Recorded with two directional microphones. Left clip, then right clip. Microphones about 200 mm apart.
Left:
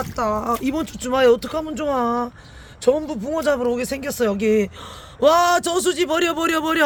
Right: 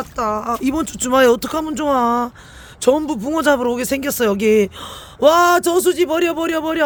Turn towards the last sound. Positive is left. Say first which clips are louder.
# right 1 dB
turn(degrees=0)  # may be behind; listen again after turning